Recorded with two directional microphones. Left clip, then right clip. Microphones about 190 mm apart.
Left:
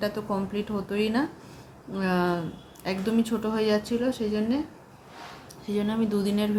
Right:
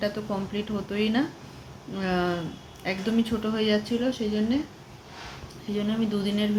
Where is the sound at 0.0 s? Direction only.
10° left (ahead or behind).